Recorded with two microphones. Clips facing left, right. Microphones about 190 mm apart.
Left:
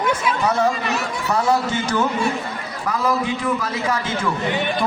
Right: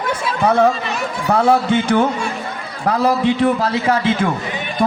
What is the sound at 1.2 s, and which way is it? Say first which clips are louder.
A man's voice: right 6 dB; 55° right (ahead or behind).